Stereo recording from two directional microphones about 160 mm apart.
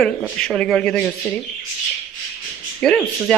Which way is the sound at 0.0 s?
5° left (ahead or behind).